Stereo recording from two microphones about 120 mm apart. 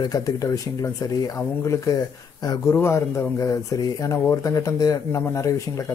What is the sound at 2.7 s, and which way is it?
Speech, 20° left (ahead or behind).